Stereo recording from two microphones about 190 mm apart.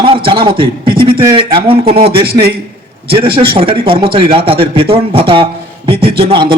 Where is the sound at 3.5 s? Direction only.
30° right (ahead or behind).